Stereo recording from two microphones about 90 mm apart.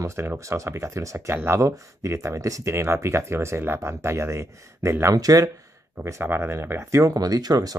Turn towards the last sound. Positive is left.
turn(degrees=-45)  # may be behind; listen again after turning